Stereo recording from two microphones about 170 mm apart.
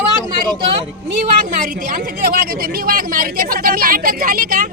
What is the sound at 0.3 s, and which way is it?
Speech, 25° right (ahead or behind).